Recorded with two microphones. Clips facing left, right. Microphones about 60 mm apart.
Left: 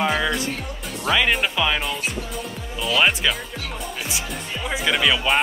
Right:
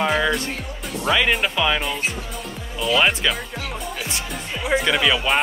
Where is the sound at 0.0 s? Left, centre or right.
Centre.